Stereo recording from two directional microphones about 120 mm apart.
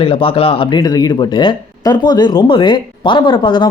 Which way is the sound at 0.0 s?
50° left (ahead or behind).